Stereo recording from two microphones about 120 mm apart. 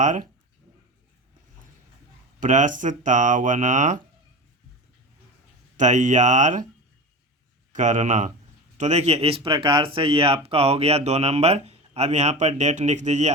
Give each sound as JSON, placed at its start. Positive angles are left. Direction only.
{"t": 2.4, "sound": "speech", "side_deg": -90}
{"t": 5.7, "sound": "speech", "side_deg": -90}
{"t": 7.7, "sound": "speech", "side_deg": -90}
{"t": 8.8, "sound": "speech", "side_deg": -70}